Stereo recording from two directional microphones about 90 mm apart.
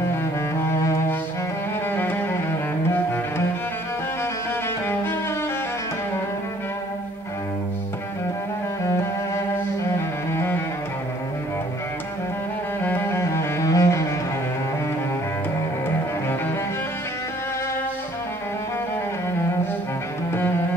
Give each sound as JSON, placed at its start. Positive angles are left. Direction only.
{"t": 0.1, "sound": "cello", "side_deg": 30}
{"t": 1.9, "sound": "music", "side_deg": 25}
{"t": 2.9, "sound": "cello", "side_deg": 25}
{"t": 10.3, "sound": "music", "side_deg": 25}
{"t": 12.8, "sound": "music", "side_deg": 25}